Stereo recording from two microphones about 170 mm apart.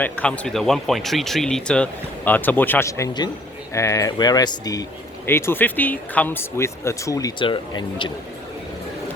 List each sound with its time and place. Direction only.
0.0 s speech: 10° left (ahead or behind); by 8.1 s 30° left (ahead or behind)